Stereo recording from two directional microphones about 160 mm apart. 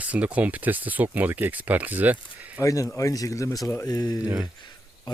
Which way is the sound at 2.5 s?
20° left (ahead or behind).